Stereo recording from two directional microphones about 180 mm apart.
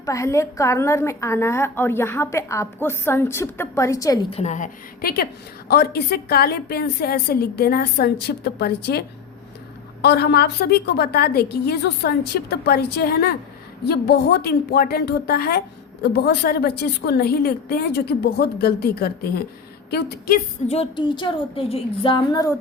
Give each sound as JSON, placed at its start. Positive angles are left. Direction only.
{"t": 0.0, "sound": "a woman's voice", "side_deg": 15}
{"t": 4.3, "sound": "a woman's voice", "side_deg": 35}
{"t": 20.7, "sound": "speech", "side_deg": 30}